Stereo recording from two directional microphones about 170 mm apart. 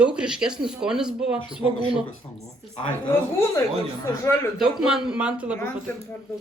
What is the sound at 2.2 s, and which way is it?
A woman's voice, 20° left (ahead or behind).